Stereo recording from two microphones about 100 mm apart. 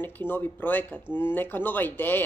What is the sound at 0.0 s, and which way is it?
Speech, 20° left (ahead or behind).